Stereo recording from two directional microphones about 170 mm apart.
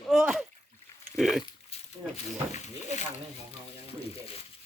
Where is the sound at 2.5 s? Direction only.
45° left (ahead or behind).